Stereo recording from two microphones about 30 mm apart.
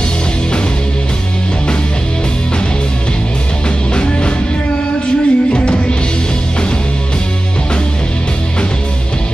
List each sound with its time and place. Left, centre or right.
3.9 s music: left